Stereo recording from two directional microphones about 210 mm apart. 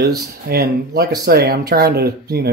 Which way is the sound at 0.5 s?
45° right (ahead or behind).